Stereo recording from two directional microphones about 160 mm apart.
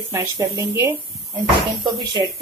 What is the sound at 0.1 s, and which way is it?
Speech, 15° right (ahead or behind).